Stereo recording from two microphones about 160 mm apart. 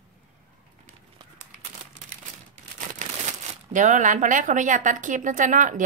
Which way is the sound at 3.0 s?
50° right (ahead or behind).